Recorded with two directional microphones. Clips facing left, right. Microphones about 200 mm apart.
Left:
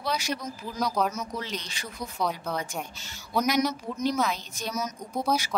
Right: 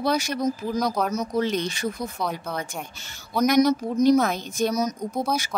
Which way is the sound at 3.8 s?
40° right (ahead or behind).